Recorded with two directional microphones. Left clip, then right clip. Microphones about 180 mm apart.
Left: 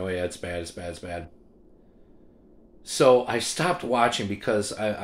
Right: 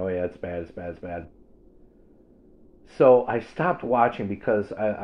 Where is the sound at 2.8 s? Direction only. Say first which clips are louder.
Right 2 dB; 35° left (ahead or behind).